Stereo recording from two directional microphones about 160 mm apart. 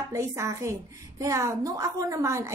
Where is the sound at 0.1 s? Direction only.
20° right (ahead or behind).